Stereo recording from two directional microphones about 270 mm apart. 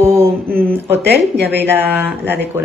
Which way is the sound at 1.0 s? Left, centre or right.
Right.